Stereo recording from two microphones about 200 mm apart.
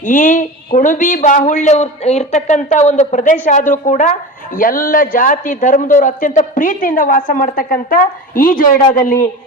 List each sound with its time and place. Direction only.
0.0 s speech: 40° left (ahead or behind)